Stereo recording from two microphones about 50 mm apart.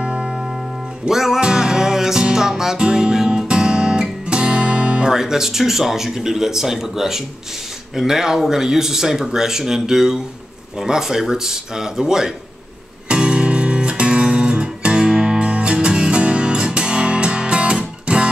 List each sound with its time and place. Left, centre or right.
0.0 s music: centre
1.0 s music: centre
5.1 s speech: centre
13.1 s music: centre